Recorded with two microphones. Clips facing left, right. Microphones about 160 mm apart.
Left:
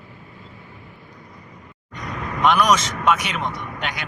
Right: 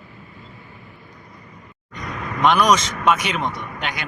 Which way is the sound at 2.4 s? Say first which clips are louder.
Right 1 dB; 5° left (ahead or behind).